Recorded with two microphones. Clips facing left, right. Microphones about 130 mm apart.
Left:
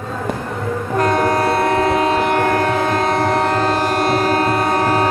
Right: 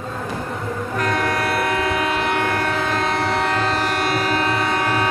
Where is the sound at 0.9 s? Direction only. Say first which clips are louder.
Left 6 dB; 35° left (ahead or behind).